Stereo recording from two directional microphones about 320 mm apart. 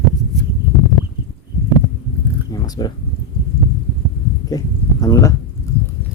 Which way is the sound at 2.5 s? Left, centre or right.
Centre.